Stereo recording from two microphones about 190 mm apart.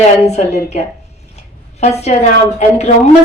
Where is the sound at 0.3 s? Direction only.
35° left (ahead or behind).